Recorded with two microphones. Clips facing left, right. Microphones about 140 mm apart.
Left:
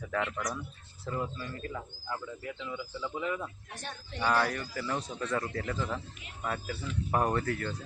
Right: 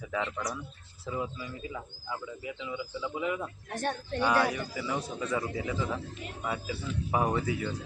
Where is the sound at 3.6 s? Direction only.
50° right (ahead or behind).